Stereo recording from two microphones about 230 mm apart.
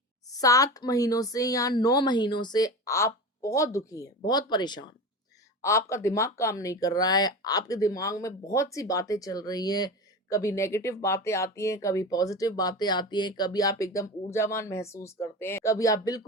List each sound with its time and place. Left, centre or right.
0.3 s speech: centre